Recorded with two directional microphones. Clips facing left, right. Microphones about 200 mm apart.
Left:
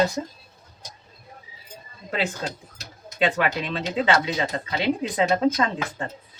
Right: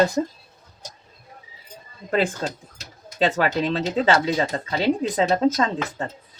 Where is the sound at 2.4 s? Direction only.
40° right (ahead or behind).